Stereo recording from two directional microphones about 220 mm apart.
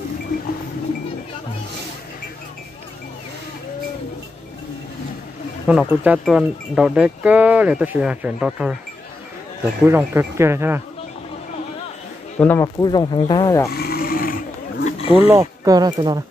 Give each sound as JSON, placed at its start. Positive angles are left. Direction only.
{"t": 5.7, "sound": "speech", "side_deg": -5}
{"t": 9.8, "sound": "speech", "side_deg": -10}
{"t": 12.4, "sound": "speech", "side_deg": 10}
{"t": 13.7, "sound": "a sound", "side_deg": 45}
{"t": 14.9, "sound": "wild animals", "side_deg": 25}
{"t": 15.3, "sound": "speech", "side_deg": -15}